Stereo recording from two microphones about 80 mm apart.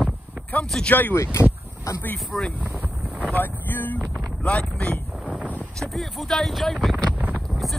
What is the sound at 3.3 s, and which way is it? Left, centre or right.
Speech, left.